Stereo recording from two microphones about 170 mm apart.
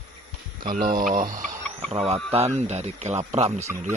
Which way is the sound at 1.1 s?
50° right (ahead or behind).